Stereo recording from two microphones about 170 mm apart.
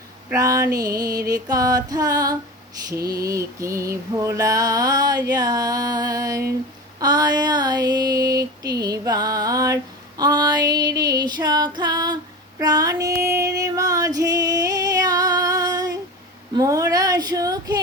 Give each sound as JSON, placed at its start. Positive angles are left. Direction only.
{"t": 0.3, "sound": "female singing", "side_deg": -20}